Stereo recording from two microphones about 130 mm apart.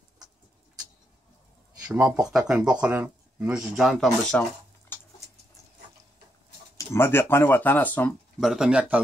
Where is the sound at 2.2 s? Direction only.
5° right (ahead or behind).